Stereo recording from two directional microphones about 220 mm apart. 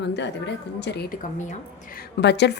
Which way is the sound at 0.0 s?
50° left (ahead or behind).